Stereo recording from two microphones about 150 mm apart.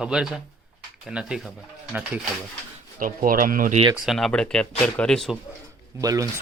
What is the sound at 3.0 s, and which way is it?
Speech, 70° right (ahead or behind).